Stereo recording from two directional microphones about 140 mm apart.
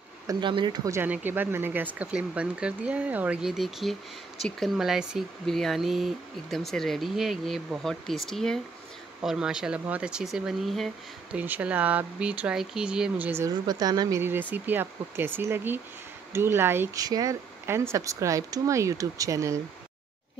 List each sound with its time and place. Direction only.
0.3 s speech: 35° right (ahead or behind)
0.9 s speech: 15° right (ahead or behind)
11.3 s speech: 10° right (ahead or behind)
13.5 s speech: 30° right (ahead or behind)
14.2 s speech: 15° right (ahead or behind)